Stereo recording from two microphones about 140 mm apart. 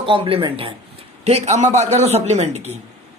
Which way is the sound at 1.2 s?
50° right (ahead or behind).